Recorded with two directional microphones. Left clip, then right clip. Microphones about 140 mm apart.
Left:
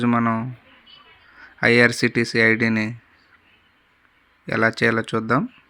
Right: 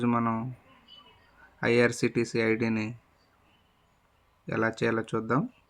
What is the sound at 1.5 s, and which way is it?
Speech, 20° left (ahead or behind).